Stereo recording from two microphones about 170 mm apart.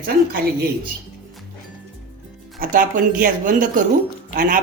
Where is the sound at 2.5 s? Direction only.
55° right (ahead or behind).